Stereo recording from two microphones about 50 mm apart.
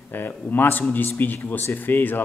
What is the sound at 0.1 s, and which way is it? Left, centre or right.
A man's voice, left.